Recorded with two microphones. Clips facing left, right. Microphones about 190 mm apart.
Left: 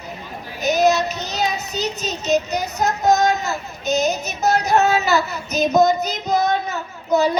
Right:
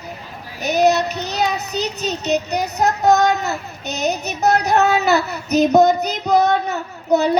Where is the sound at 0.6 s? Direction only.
65° right (ahead or behind).